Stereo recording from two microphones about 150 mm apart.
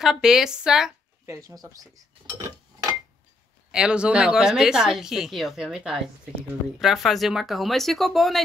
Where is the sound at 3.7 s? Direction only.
5° right (ahead or behind).